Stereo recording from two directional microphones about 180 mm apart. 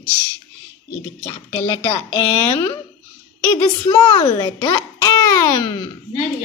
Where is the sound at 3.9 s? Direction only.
30° left (ahead or behind).